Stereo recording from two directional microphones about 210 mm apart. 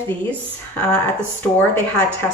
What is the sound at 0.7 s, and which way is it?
Speech, 5° left (ahead or behind).